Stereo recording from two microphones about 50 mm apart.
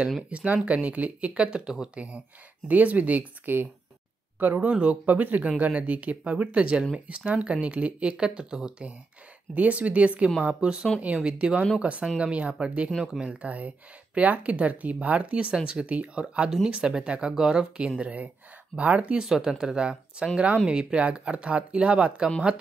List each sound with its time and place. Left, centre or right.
0.3 s speech: right
4.6 s speech: right
9.5 s speech: right
15.5 s speech: centre
15.8 s speech: right
19.2 s speech: centre
20.3 s speech: right
20.6 s speech: centre